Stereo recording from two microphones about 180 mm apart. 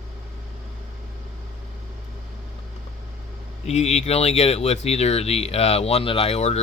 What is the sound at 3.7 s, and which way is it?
Speech, 35° left (ahead or behind).